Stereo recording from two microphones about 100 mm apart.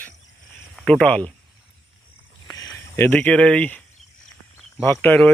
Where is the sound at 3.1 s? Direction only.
10° left (ahead or behind).